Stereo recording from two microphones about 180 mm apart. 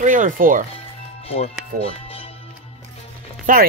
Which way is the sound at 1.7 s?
55° right (ahead or behind).